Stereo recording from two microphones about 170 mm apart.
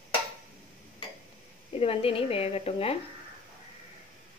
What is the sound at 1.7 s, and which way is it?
A woman's voice, 35° left (ahead or behind).